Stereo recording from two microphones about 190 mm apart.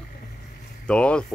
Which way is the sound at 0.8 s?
5° left (ahead or behind).